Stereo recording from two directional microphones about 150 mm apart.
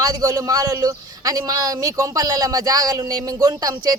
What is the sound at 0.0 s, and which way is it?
Speech, 25° right (ahead or behind).